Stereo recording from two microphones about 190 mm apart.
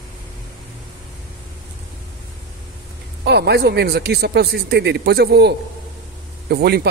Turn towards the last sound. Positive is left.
turn(degrees=-55)  # may be behind; listen again after turning